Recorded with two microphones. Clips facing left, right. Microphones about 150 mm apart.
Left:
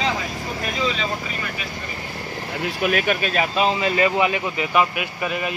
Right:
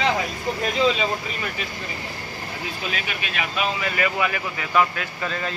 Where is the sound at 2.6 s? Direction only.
60° left (ahead or behind).